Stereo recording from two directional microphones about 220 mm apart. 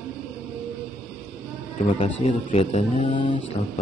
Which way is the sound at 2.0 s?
25° left (ahead or behind).